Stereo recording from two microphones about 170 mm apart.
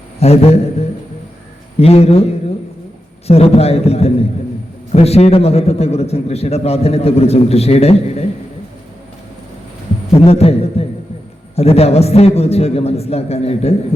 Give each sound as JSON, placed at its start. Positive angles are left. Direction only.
{"t": 0.2, "sound": "a man's voice", "side_deg": 40}
{"t": 10.2, "sound": "a man's voice", "side_deg": 35}